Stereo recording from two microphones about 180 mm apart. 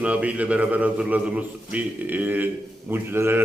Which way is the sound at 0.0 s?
5° right (ahead or behind).